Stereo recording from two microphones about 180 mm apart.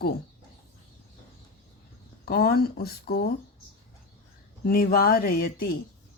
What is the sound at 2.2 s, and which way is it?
A woman's voice, 55° left (ahead or behind).